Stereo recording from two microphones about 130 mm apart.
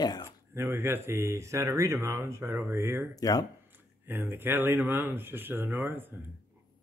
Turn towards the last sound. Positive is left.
turn(degrees=-15)  # may be behind; listen again after turning